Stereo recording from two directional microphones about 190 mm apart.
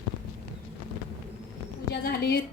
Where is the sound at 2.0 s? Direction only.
55° left (ahead or behind).